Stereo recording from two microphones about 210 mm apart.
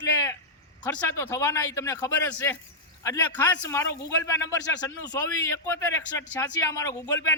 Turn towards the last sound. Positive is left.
turn(degrees=15)  # may be behind; listen again after turning